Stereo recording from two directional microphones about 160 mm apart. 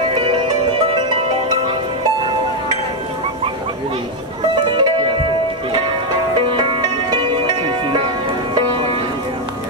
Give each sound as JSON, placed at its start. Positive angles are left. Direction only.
{"t": 0.1, "sound": "music", "side_deg": -30}
{"t": 4.6, "sound": "music", "side_deg": -30}
{"t": 6.8, "sound": "music", "side_deg": -25}